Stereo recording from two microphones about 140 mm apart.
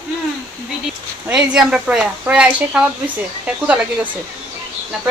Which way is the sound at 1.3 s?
5° right (ahead or behind).